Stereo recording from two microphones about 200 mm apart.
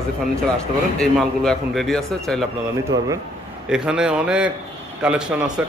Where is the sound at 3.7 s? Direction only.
5° right (ahead or behind).